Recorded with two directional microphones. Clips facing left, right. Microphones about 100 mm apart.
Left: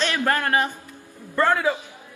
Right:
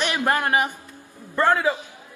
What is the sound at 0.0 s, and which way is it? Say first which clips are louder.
A man's voice: even; 15° right (ahead or behind).